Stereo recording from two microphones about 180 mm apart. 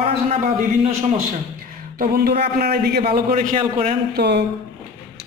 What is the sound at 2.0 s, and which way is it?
A man's voice, 55° right (ahead or behind).